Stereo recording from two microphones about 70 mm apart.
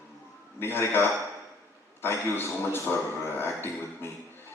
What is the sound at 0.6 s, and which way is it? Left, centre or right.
A man's voice, left.